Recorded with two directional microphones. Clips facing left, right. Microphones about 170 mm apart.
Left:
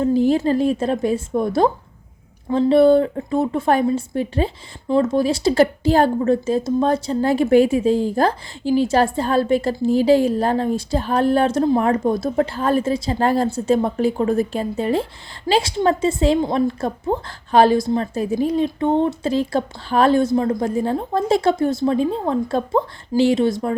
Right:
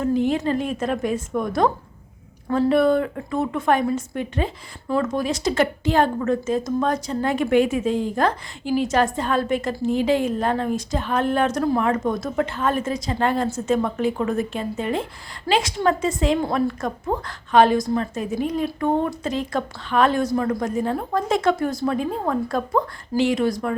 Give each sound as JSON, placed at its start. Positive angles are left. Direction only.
{"t": 0.0, "sound": "a woman's voice", "side_deg": 35}